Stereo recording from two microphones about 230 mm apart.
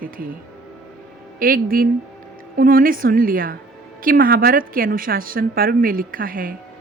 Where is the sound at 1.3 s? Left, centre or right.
Right.